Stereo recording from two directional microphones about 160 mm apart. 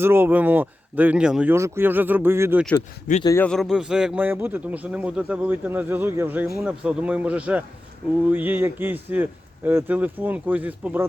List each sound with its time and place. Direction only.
0.0 s a man's voice: 15° right (ahead or behind)
1.5 s a man's voice: 15° right (ahead or behind)
3.1 s speech: 55° left (ahead or behind)
3.4 s a man's voice: centre (ahead or behind)